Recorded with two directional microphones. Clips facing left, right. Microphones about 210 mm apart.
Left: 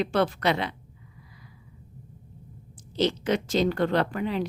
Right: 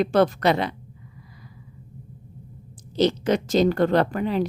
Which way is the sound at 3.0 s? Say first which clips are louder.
Right 4 dB; 40° right (ahead or behind).